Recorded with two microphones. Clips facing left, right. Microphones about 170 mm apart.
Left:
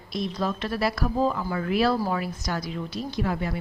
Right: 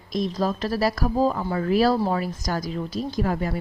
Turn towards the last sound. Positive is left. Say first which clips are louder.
# right 3 dB
turn(degrees=-40)  # may be behind; listen again after turning